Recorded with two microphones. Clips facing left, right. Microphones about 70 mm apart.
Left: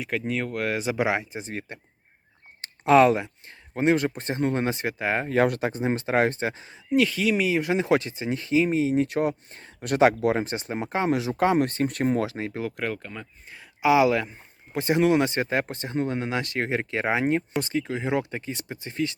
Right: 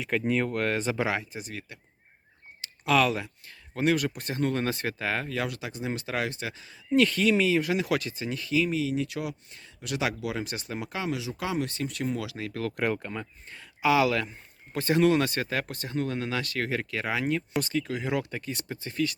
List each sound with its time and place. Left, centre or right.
0.1 s speech: centre; by 5.3 s left
5.3 s speech: left
6.9 s speech: centre; by 11.2 s left
11.2 s speech: left
12.8 s speech: centre
13.5 s speech: centre